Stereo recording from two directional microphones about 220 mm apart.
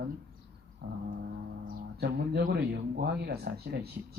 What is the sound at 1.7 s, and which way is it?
Speech, 45° right (ahead or behind).